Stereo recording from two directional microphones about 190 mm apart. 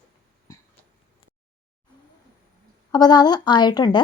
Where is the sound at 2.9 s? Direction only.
20° left (ahead or behind).